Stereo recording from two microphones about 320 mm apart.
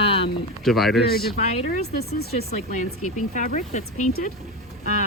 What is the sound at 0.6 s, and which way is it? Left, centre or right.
Speech, centre.